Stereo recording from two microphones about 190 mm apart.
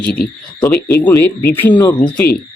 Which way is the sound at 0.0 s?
55° left (ahead or behind).